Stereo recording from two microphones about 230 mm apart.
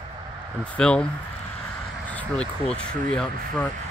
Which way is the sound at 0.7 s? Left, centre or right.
Centre.